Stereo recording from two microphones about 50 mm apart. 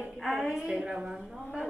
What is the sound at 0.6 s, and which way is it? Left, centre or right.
Speech, centre.